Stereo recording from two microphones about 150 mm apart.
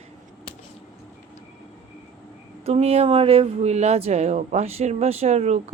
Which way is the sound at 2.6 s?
45° right (ahead or behind).